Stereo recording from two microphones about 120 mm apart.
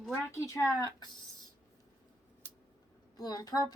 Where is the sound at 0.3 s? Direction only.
25° left (ahead or behind).